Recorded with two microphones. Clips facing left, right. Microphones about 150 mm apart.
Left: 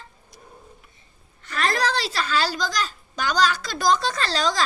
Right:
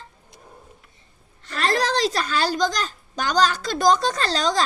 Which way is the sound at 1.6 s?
40° right (ahead or behind).